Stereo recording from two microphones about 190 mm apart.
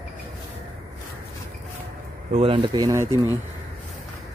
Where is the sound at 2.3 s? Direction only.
30° right (ahead or behind).